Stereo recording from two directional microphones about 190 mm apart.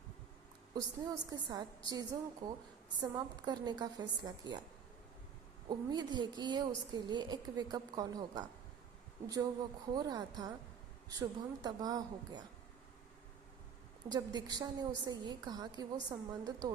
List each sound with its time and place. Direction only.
0.7 s a woman's voice: 20° right (ahead or behind)
5.6 s a woman's voice: 20° right (ahead or behind)
14.1 s a woman's voice: 20° right (ahead or behind)